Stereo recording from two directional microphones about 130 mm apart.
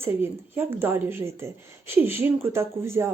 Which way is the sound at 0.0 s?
20° right (ahead or behind).